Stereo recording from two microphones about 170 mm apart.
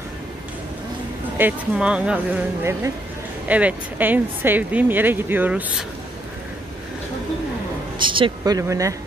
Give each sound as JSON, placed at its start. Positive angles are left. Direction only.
{"t": 1.4, "sound": "speech", "side_deg": -5}
{"t": 8.0, "sound": "speech", "side_deg": -30}